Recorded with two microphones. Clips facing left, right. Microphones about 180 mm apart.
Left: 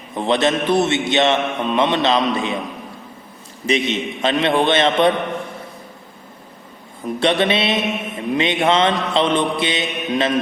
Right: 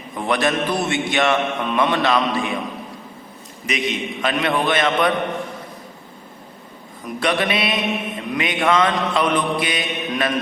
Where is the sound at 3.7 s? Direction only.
25° left (ahead or behind).